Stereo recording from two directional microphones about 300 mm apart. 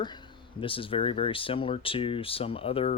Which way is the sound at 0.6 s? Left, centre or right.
Centre.